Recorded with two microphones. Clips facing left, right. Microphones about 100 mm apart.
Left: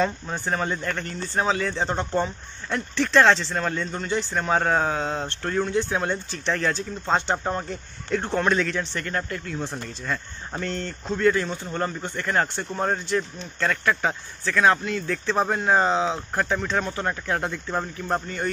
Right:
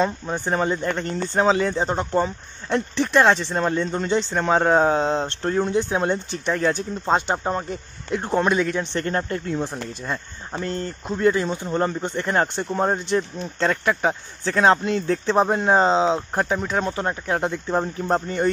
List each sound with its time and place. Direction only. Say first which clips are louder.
0.0 s speech: right 2 dB; 20° right (ahead or behind)
1.8 s speech: right 3 dB; 10° right (ahead or behind)
9.0 s speech: right 5 dB; 35° right (ahead or behind)
10.7 s speech: right 2 dB; 15° right (ahead or behind)